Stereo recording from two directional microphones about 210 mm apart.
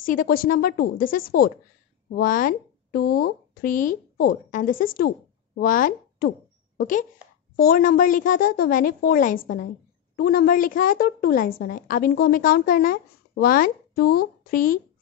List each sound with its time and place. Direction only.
0.0 s a woman's voice: 40° left (ahead or behind)